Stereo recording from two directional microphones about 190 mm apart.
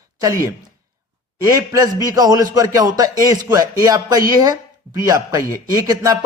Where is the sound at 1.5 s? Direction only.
20° right (ahead or behind).